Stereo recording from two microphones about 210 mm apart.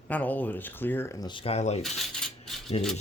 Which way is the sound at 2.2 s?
Centre (ahead or behind).